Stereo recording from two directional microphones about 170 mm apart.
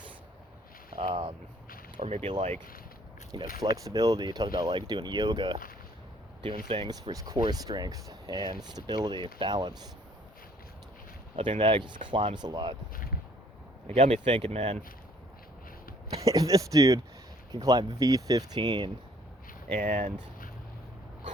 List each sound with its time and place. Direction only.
0.9 s speech: 35° right (ahead or behind)
3.6 s speech: 20° right (ahead or behind)
6.7 s speech: 25° right (ahead or behind)
11.3 s speech: 30° right (ahead or behind)
12.9 s a sound: 55° left (ahead or behind)
13.8 s speech: 35° right (ahead or behind)
16.2 s speech: 20° right (ahead or behind)
19.8 s speech: 50° right (ahead or behind)